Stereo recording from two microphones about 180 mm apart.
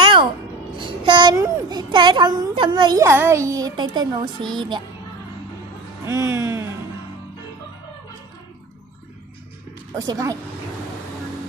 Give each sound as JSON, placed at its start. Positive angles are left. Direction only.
{"t": 0.0, "sound": "music", "side_deg": -25}
{"t": 0.8, "sound": "a child's voice", "side_deg": -25}
{"t": 6.1, "sound": "speech", "side_deg": -15}
{"t": 9.9, "sound": "speech", "side_deg": -20}